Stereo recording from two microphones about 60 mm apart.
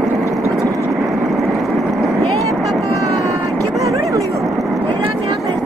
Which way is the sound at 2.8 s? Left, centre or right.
Right.